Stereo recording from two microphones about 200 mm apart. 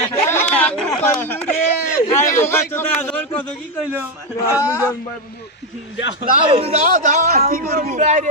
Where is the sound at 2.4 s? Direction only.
10° left (ahead or behind).